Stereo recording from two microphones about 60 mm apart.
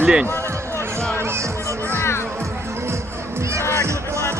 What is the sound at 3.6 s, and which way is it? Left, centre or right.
Music, left.